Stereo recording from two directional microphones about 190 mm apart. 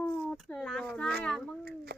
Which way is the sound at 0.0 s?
5° left (ahead or behind).